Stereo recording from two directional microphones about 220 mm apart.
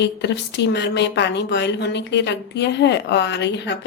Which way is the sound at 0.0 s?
50° left (ahead or behind).